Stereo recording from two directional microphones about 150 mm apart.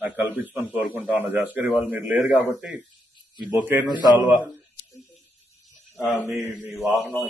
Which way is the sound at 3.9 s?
30° left (ahead or behind).